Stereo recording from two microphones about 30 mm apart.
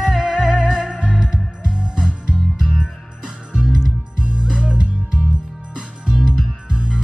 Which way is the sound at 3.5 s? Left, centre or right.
Right.